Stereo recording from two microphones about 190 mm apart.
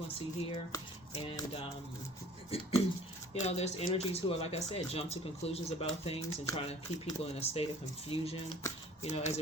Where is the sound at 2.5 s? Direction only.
30° left (ahead or behind).